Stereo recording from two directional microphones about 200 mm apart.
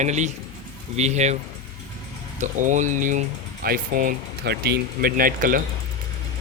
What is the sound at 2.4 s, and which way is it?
Speech, 40° right (ahead or behind).